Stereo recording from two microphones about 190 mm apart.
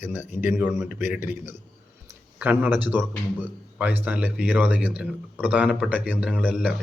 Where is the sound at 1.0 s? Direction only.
45° left (ahead or behind).